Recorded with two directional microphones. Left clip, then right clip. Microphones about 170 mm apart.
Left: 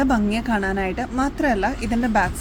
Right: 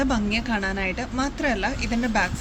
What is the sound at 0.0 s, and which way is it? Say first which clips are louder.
Speech: left 3 dB; 45° left (ahead or behind).